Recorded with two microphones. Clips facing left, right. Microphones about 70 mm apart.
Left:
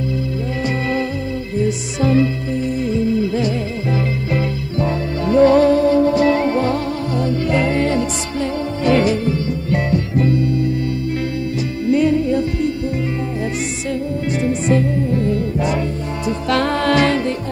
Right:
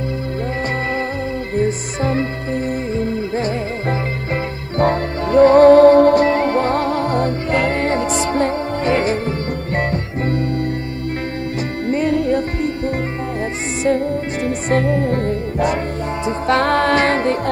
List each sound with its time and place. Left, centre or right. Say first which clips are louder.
1.6 s music: left 1 dB; right
4.7 s music: right 5 dB; right
12.1 s music: even; right
13.8 s music: right 6 dB; right
16.3 s music: right 1 dB; right
16.6 s music: left 1 dB; right